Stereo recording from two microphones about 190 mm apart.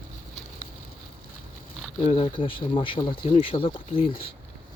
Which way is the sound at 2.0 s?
30° left (ahead or behind).